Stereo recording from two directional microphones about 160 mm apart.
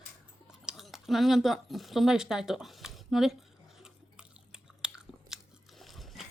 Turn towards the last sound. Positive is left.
turn(degrees=0)  # may be behind; listen again after turning